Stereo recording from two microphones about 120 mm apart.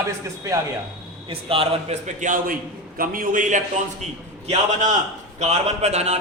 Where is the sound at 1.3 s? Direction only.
50° right (ahead or behind).